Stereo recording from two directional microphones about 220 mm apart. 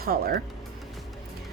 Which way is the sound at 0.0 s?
45° right (ahead or behind).